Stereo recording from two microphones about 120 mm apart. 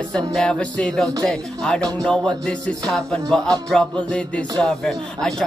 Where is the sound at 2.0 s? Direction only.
5° left (ahead or behind).